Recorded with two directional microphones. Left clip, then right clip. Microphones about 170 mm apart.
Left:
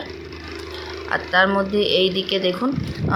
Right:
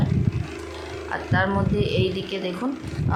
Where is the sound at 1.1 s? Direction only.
25° left (ahead or behind).